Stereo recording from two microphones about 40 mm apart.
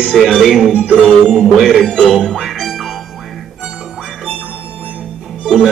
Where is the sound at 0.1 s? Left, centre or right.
Centre.